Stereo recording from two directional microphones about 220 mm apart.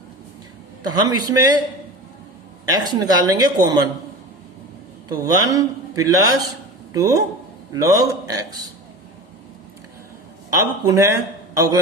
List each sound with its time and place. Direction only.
1.0 s a man's voice: 20° right (ahead or behind)
2.8 s a man's voice: 15° right (ahead or behind)
5.0 s a man's voice: 15° right (ahead or behind)
10.6 s a man's voice: 15° right (ahead or behind)